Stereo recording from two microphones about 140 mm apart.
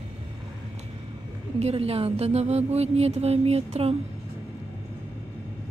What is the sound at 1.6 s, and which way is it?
Speech, 45° right (ahead or behind).